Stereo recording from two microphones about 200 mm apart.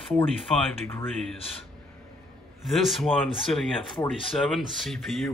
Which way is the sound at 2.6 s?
Centre (ahead or behind).